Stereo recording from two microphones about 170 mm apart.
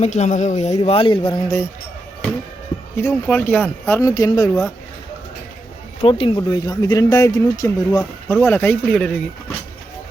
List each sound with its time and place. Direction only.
0.0 s speech: 45° left (ahead or behind); by 1.5 s 25° left (ahead or behind)
3.0 s speech: 15° left (ahead or behind)
6.0 s speech: 30° left (ahead or behind); by 9.2 s 5° left (ahead or behind)